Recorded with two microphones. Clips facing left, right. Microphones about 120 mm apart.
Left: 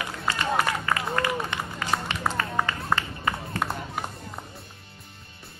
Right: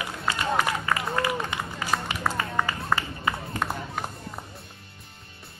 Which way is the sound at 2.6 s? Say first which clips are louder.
Right 1 dB; 10° right (ahead or behind).